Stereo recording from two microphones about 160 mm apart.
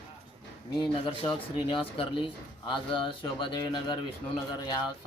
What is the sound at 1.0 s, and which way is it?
Speech, 35° left (ahead or behind).